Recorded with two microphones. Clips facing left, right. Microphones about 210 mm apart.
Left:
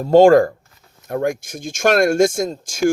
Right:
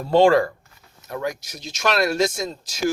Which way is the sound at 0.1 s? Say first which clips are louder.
Left 6 dB; 45° left (ahead or behind).